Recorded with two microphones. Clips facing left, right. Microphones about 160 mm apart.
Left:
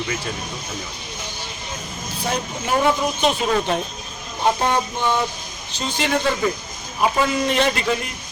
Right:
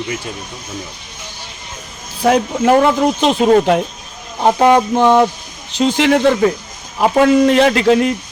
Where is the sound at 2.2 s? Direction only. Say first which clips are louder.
Right 13 dB; 90° right.